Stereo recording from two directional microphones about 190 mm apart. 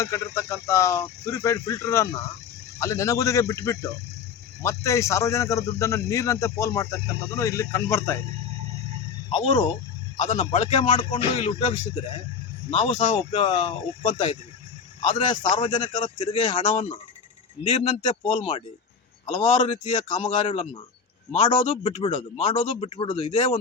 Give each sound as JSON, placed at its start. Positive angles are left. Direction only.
{"t": 0.0, "sound": "a man's voice", "side_deg": 15}
{"t": 9.3, "sound": "a man's voice", "side_deg": 25}
{"t": 10.2, "sound": "a man's voice", "side_deg": 40}
{"t": 12.8, "sound": "a man's voice", "side_deg": 40}